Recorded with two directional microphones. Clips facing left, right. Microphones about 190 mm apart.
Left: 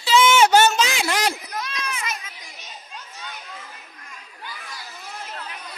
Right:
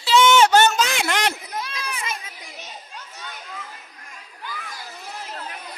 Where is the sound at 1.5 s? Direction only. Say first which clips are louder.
Even; 30° right (ahead or behind).